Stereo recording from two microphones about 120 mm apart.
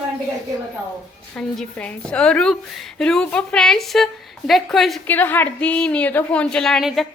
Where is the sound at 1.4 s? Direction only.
10° left (ahead or behind).